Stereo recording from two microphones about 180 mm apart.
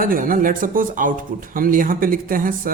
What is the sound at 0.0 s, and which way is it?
Speech, 50° right (ahead or behind).